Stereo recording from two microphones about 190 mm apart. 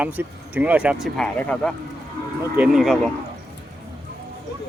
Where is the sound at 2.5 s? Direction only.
5° right (ahead or behind).